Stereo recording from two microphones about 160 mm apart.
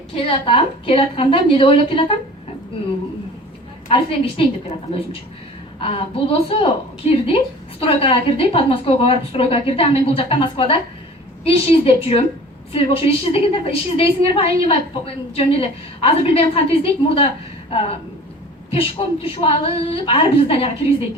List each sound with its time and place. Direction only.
0.3 s a woman's voice: 35° left (ahead or behind)
3.8 s a woman's voice: 35° left (ahead or behind)
5.8 s a woman's voice: 35° left (ahead or behind)